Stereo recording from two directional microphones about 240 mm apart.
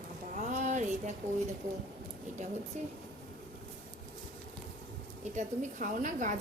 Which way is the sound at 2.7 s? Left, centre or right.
Right.